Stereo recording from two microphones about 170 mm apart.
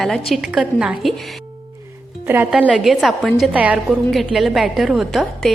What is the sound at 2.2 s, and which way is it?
A woman's voice, 10° right (ahead or behind).